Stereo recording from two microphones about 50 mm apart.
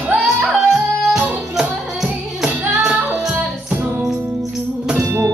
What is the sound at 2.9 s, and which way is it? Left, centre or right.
Music, right.